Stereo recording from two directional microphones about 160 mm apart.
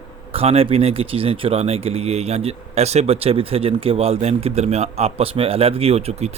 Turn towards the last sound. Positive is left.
turn(degrees=-40)  # may be behind; listen again after turning